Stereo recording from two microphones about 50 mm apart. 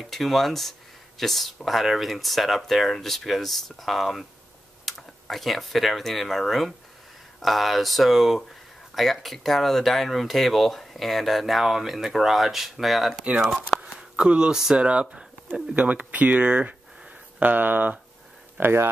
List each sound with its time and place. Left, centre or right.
0.0 s speech: centre
13.7 s a sound: centre
14.8 s speech: right
15.8 s speech: right
18.6 s speech: right